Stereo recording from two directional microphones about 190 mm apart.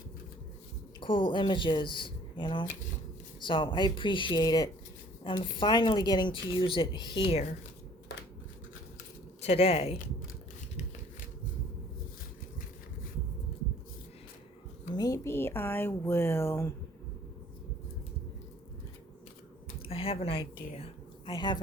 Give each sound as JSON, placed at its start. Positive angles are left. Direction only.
{"t": 0.9, "sound": "speech", "side_deg": 25}
{"t": 9.4, "sound": "speech", "side_deg": 35}
{"t": 14.9, "sound": "speech", "side_deg": 20}
{"t": 19.9, "sound": "speech", "side_deg": 30}